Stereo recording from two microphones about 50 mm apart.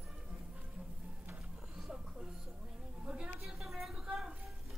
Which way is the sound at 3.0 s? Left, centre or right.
Right.